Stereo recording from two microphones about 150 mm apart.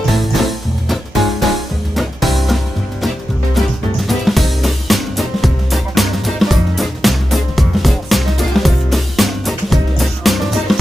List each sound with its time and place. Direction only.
0.1 s music: centre (ahead or behind)